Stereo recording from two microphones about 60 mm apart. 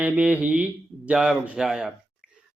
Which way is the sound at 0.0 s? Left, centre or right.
Right.